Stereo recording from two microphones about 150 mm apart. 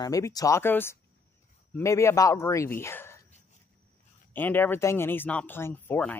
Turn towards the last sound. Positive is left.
turn(degrees=10)  # may be behind; listen again after turning